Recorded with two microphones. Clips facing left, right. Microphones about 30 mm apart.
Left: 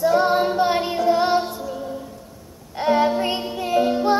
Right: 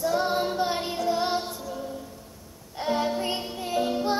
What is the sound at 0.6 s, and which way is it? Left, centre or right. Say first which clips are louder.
Child singing: left 7 dB; left.